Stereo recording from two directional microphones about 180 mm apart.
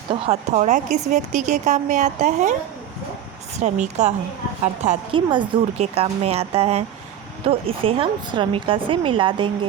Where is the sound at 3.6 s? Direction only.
40° right (ahead or behind).